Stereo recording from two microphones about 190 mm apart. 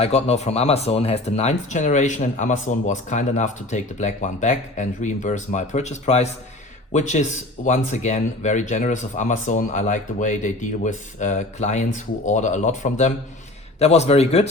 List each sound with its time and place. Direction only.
0.0 s speech: 35° left (ahead or behind)